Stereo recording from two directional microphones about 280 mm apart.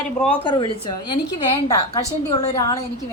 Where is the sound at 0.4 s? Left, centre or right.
Centre.